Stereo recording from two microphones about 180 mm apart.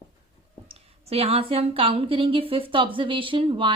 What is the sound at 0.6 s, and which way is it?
A woman's voice, 35° right (ahead or behind).